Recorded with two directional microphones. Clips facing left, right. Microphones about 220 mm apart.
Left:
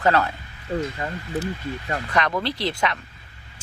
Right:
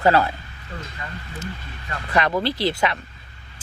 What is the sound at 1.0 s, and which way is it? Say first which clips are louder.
Speech: left 6 dB; 40° left (ahead or behind).